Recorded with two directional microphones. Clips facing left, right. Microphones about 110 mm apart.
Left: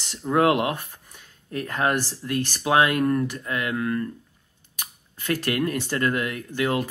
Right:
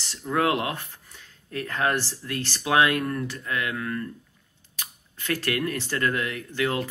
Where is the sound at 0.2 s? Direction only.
25° left (ahead or behind).